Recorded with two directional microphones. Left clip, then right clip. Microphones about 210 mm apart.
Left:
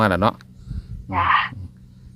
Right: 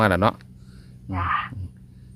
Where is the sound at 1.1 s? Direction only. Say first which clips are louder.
Left 7 dB; 45° left (ahead or behind).